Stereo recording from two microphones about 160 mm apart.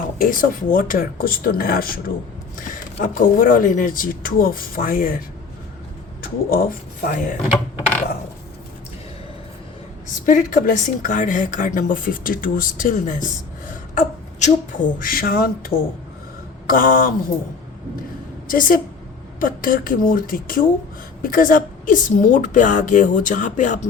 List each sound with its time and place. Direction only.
0.2 s speech: 60° left (ahead or behind)
6.2 s speech: 65° left (ahead or behind)
10.2 s speech: 55° left (ahead or behind)
18.4 s a woman's voice: 60° left (ahead or behind)